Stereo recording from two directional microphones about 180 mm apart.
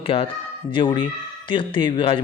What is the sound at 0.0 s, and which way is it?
Speech, 30° left (ahead or behind).